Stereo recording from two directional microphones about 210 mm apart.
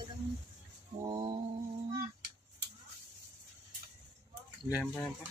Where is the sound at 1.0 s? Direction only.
25° right (ahead or behind).